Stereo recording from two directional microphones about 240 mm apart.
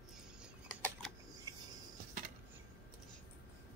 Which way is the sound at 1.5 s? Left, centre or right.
Centre.